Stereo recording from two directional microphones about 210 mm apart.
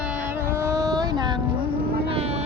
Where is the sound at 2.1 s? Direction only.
30° right (ahead or behind).